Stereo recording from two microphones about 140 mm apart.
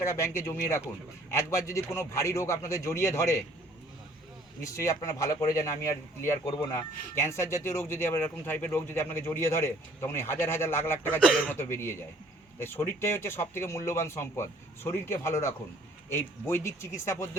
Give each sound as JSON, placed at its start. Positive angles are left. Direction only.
{"t": 0.0, "sound": "speech", "side_deg": 20}
{"t": 4.6, "sound": "speech", "side_deg": 20}
{"t": 6.7, "sound": "speech", "side_deg": 20}